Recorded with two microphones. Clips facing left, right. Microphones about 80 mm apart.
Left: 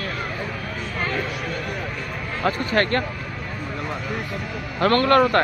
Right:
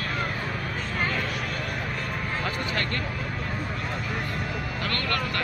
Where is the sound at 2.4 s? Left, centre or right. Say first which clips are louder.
Left 12 dB; left.